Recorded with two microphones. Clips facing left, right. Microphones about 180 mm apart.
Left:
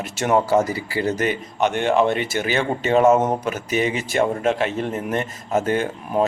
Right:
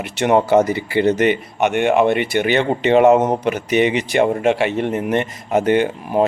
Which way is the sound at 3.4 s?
70° right (ahead or behind).